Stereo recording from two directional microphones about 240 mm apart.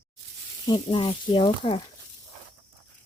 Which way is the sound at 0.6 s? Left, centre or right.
Centre.